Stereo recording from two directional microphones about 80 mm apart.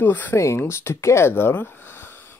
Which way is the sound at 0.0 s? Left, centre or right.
Left.